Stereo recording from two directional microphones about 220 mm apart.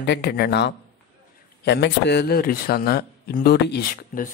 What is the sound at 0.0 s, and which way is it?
Speech, 50° left (ahead or behind).